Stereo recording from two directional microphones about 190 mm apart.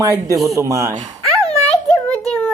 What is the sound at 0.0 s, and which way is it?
Speech, 15° right (ahead or behind).